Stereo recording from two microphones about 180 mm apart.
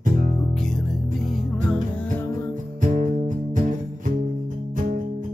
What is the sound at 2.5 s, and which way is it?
Music, 45° right (ahead or behind).